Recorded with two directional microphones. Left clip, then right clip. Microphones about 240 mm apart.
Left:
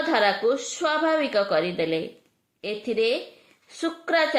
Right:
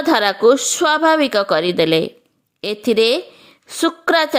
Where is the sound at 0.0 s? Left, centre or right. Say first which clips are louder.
Right 8 dB; right.